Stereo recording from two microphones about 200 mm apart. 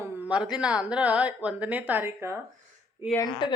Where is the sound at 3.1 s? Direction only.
20° left (ahead or behind).